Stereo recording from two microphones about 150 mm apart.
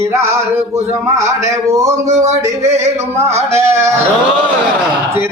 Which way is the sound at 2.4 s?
20° right (ahead or behind).